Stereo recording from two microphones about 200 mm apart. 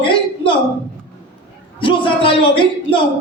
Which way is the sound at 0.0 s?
25° left (ahead or behind).